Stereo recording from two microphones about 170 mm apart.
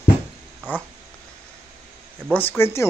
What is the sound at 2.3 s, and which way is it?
Speech, 10° left (ahead or behind).